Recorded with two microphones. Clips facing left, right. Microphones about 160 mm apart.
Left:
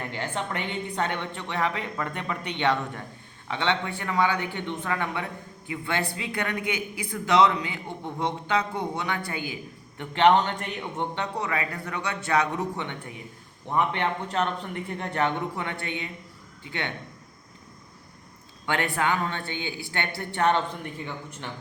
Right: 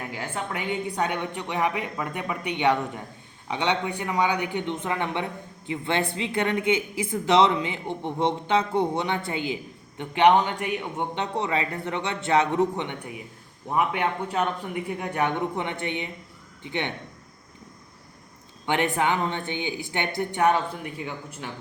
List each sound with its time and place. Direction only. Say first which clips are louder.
0.0 s a woman's voice: left 1 dB; 5° right (ahead or behind); by 9.6 s 25° right (ahead or behind)
10.0 s a woman's voice: right 1 dB; 15° right (ahead or behind)
11.2 s a woman's voice: right 5 dB; 25° right (ahead or behind)
18.6 s a woman's voice: right 3 dB; 20° right (ahead or behind)